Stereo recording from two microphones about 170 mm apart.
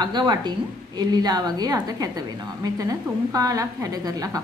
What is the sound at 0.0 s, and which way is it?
A woman's voice, 25° right (ahead or behind).